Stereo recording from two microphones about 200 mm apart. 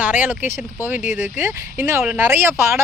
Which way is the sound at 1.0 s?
40° left (ahead or behind).